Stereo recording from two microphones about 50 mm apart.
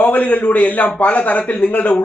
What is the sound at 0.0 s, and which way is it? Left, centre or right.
A man's voice, left.